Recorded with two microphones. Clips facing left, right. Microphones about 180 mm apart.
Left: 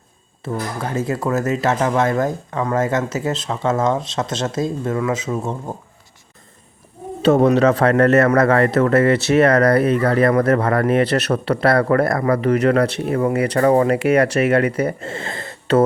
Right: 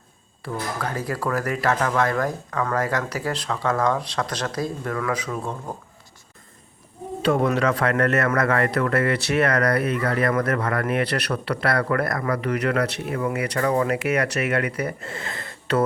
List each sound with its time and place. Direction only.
0.4 s speech: 20° left (ahead or behind)
7.4 s speech: 25° left (ahead or behind)